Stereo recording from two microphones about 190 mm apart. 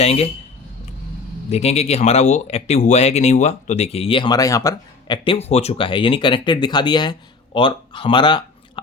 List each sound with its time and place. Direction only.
0.0 s speech: 35° left (ahead or behind)
1.5 s speech: 35° left (ahead or behind)